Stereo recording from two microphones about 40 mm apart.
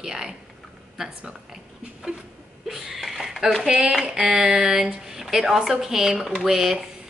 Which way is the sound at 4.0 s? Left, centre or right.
Right.